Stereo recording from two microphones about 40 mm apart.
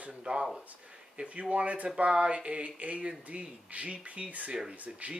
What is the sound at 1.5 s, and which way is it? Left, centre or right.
Speech, right.